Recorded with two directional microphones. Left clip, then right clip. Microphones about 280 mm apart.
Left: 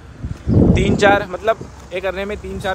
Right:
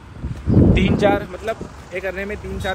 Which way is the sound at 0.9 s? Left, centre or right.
Left.